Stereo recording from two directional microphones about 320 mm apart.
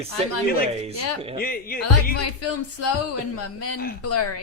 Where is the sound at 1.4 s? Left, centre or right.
Left.